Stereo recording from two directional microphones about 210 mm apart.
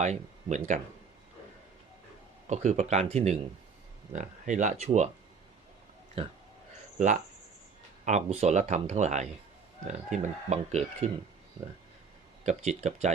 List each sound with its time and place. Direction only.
0.0 s speech: 35° right (ahead or behind)
2.5 s speech: 35° right (ahead or behind)
6.2 s speech: 25° right (ahead or behind)
8.0 s speech: 30° right (ahead or behind)
12.5 s speech: 35° right (ahead or behind)